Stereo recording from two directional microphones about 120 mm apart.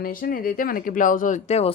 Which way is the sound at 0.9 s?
90° left.